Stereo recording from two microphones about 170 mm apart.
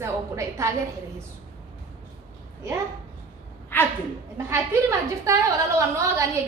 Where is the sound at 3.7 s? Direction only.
10° left (ahead or behind).